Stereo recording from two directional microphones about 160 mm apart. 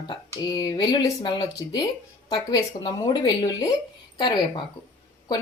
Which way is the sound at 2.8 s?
25° left (ahead or behind).